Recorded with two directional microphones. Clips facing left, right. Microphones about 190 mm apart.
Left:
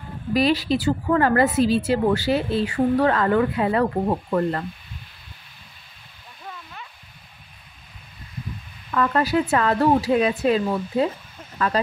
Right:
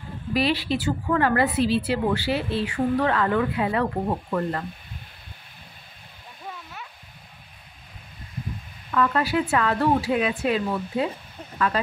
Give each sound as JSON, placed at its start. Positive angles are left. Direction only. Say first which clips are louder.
{"t": 0.3, "sound": "a woman's voice", "louder": "left 4 dB", "side_deg": 40}
{"t": 6.4, "sound": "a sound", "louder": "even", "side_deg": -5}
{"t": 8.9, "sound": "a woman's voice", "louder": "left 2 dB", "side_deg": 40}